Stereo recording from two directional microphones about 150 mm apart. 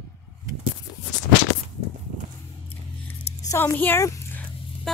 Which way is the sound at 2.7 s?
15° left (ahead or behind).